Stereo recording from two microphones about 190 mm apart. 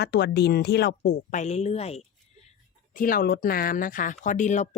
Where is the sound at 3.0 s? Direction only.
50° left (ahead or behind).